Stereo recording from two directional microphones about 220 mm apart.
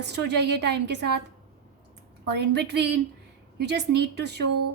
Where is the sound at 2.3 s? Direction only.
50° right (ahead or behind).